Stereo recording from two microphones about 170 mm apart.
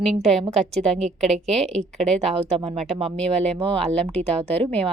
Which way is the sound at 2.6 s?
30° right (ahead or behind).